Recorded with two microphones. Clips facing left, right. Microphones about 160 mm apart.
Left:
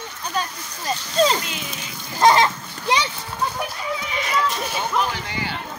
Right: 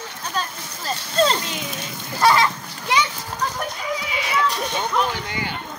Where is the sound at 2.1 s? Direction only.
25° left (ahead or behind).